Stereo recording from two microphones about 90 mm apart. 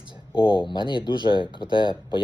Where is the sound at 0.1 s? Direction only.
65° left (ahead or behind).